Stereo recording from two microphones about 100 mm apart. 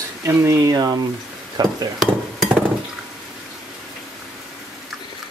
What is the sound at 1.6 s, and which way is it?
Dishes, 40° right (ahead or behind).